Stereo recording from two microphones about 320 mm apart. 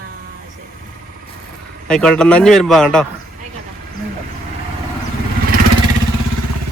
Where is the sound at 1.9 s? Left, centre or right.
Centre.